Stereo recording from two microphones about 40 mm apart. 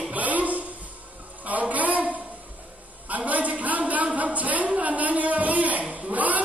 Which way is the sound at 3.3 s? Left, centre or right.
Right.